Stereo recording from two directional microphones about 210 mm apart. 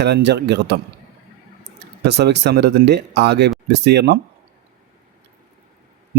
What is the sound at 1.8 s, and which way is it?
Speech, 55° right (ahead or behind).